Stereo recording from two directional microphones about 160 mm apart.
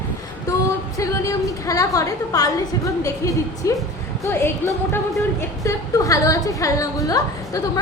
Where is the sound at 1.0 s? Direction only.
20° left (ahead or behind).